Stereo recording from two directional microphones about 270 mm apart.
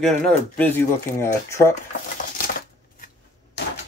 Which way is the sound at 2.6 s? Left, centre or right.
Left.